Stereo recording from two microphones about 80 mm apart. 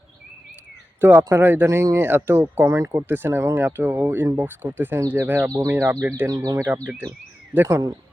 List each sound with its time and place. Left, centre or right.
1.0 s speech: right
3.1 s speech: right
6.2 s speech: right
7.5 s speech: right